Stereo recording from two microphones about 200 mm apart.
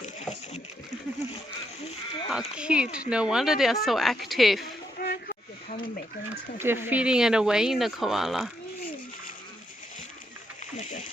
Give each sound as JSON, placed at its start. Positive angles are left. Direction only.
{"t": 2.3, "sound": "speech", "side_deg": -5}
{"t": 4.9, "sound": "snake", "side_deg": 45}
{"t": 6.6, "sound": "speech", "side_deg": -10}